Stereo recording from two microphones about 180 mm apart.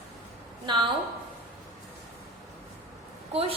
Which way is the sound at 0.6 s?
25° right (ahead or behind).